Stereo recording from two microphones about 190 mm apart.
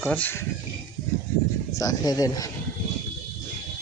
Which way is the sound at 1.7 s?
20° left (ahead or behind).